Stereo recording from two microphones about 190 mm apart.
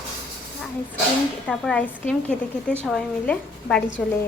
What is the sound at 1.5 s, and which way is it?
Speech, 5° left (ahead or behind).